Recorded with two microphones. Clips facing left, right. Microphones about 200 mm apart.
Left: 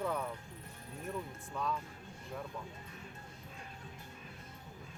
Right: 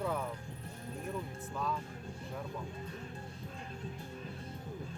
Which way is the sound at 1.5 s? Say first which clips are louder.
Even; centre (ahead or behind).